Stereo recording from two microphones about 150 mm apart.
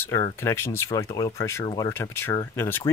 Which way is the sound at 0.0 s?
15° left (ahead or behind).